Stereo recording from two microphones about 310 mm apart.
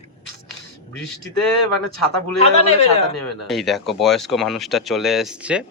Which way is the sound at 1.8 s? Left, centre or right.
Left.